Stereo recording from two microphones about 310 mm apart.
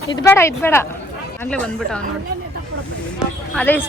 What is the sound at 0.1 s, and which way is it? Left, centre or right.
A woman's voice, centre.